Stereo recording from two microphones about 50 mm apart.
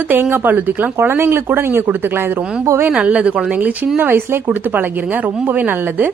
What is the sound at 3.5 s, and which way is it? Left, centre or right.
Speech, right.